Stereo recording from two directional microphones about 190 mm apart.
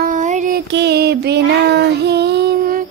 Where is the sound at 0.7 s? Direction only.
60° right (ahead or behind).